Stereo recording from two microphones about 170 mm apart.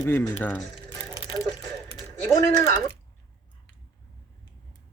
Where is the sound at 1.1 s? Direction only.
30° left (ahead or behind).